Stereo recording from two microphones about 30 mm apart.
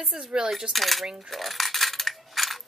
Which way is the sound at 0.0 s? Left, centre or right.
Centre.